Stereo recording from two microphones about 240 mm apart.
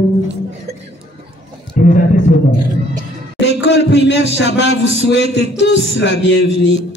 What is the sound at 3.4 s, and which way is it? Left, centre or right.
A man's voice, left.